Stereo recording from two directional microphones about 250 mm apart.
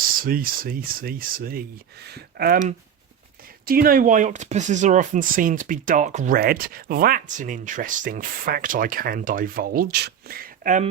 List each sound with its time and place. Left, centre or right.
0.0 s speech: right